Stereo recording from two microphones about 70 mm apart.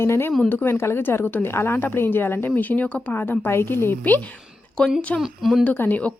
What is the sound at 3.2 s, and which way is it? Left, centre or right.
A woman's voice, left.